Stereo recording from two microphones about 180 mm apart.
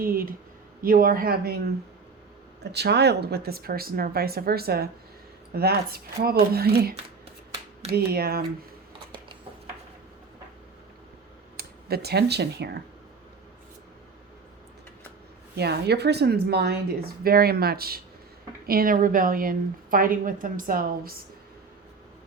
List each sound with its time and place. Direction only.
0.0 s a woman's voice: 55° right (ahead or behind)
2.7 s speech: 65° right (ahead or behind)
11.5 s speech: 60° right (ahead or behind)
15.5 s a woman's voice: 65° right (ahead or behind)